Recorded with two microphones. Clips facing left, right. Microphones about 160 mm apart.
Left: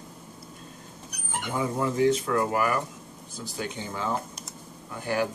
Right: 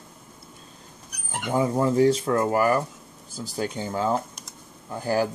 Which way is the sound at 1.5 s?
35° right (ahead or behind).